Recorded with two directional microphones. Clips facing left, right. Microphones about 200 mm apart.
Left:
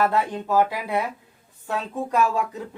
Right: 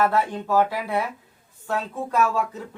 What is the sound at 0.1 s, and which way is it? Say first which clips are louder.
Speech: even; 15° left (ahead or behind).